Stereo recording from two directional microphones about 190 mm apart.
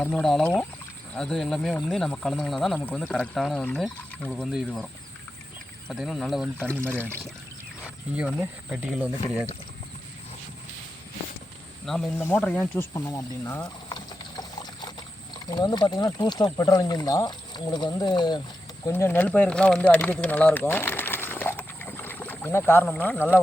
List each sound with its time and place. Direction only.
0.0 s speech: 5° left (ahead or behind)
5.9 s speech: centre (ahead or behind)
8.4 s speech: 5° right (ahead or behind)
11.9 s speech: 5° left (ahead or behind); by 18.3 s 25° left (ahead or behind)
18.9 s speech: 10° left (ahead or behind)